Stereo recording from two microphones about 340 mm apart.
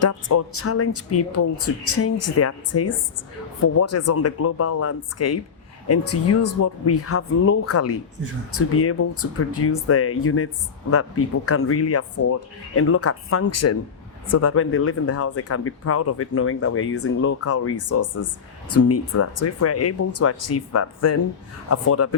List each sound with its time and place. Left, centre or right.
0.0 s speech: left